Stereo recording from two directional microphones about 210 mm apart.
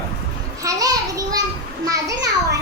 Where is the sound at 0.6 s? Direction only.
15° right (ahead or behind).